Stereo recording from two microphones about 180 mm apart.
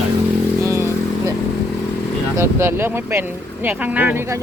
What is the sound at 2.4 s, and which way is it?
Speech, 15° right (ahead or behind).